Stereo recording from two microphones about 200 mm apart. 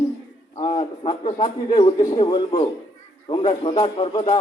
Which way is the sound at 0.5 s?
25° left (ahead or behind).